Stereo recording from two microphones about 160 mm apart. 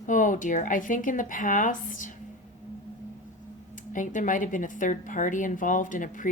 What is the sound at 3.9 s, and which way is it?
Speech, 55° left (ahead or behind).